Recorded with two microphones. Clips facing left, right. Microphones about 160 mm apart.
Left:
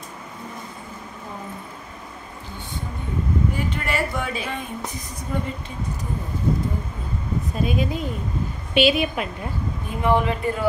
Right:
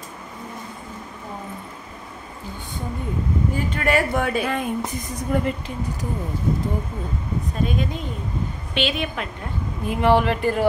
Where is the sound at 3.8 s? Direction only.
50° right (ahead or behind).